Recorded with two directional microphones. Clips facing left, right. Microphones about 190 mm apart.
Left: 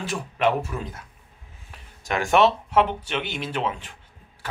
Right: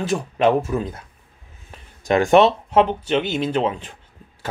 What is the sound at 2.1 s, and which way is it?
Speech, 30° right (ahead or behind).